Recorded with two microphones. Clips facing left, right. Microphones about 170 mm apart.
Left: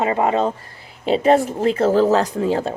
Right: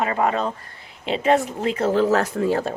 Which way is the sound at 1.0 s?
40° left (ahead or behind).